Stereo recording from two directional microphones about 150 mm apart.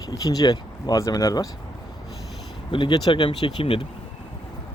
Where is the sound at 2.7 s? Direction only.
30° left (ahead or behind).